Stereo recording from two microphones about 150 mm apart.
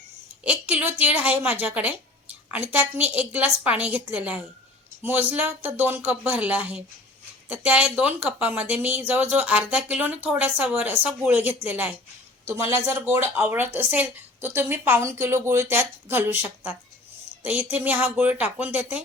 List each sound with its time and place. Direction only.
0.4 s speech: 10° right (ahead or behind)